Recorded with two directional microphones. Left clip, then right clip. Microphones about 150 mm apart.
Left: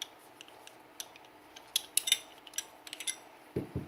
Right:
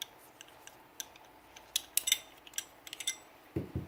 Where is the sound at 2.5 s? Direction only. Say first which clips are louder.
Left 1 dB; 15° right (ahead or behind).